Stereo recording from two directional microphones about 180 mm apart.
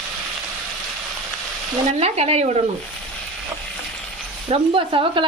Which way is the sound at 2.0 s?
35° right (ahead or behind).